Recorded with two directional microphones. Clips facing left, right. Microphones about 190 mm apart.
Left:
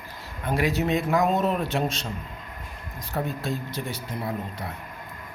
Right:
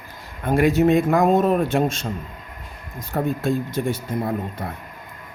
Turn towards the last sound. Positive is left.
turn(degrees=-50)  # may be behind; listen again after turning